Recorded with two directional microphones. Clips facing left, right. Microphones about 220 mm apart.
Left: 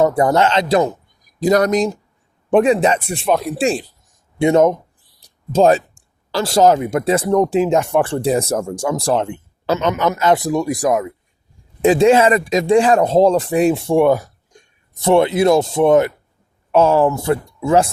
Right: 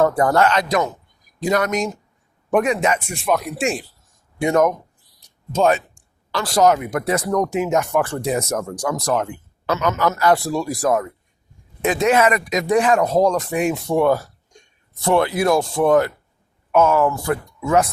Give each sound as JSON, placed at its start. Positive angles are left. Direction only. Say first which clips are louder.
{"t": 0.0, "sound": "speech", "louder": "left 2 dB", "side_deg": 20}
{"t": 1.4, "sound": "speech", "louder": "left 6 dB", "side_deg": 40}
{"t": 11.8, "sound": "speech", "louder": "left 5 dB", "side_deg": 30}